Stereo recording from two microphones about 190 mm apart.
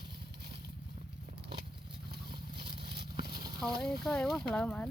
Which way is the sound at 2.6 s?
25° right (ahead or behind).